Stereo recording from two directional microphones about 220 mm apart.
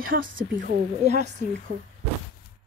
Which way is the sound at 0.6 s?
35° right (ahead or behind).